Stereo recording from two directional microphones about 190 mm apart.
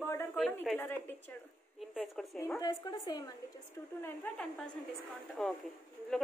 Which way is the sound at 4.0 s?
10° left (ahead or behind).